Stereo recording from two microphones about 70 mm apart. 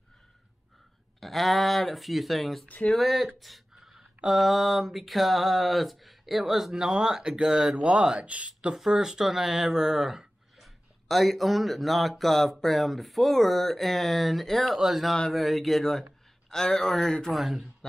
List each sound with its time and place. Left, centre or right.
1.2 s speech: centre
8.7 s speech: centre
17.4 s speech: centre